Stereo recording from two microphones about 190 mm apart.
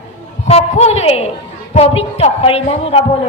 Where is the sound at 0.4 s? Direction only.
35° left (ahead or behind).